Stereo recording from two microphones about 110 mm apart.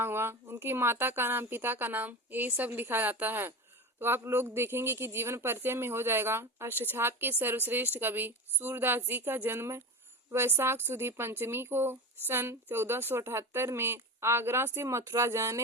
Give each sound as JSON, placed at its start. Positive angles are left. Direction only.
{"t": 0.0, "sound": "speech", "side_deg": -20}